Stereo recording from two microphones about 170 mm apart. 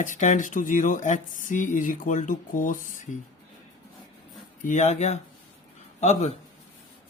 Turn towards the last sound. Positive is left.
turn(degrees=40)  # may be behind; listen again after turning